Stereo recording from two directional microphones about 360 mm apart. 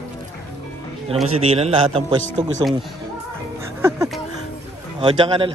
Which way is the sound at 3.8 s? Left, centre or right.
Centre.